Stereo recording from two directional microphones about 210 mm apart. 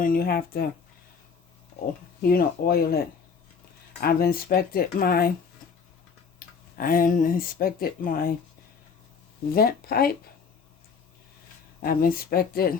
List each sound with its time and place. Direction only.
0.0 s speech: 45° left (ahead or behind)
2.2 s speech: 45° left (ahead or behind)
4.0 s speech: 45° left (ahead or behind)
6.4 s tick-tock: 45° left (ahead or behind)
6.7 s speech: 40° left (ahead or behind)
9.5 s speech: 45° left (ahead or behind)
11.8 s speech: 45° left (ahead or behind)